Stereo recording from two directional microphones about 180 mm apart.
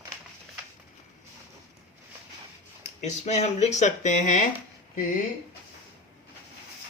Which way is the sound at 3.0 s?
40° left (ahead or behind).